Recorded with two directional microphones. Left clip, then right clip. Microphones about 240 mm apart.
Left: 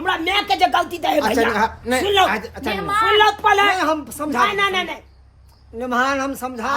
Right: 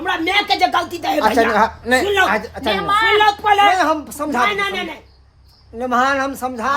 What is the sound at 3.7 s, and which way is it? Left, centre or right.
Speech, centre.